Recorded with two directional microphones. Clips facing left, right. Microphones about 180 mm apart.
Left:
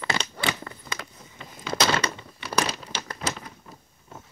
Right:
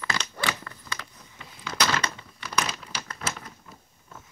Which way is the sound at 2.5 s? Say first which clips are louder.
Left 3 dB; 35° left (ahead or behind).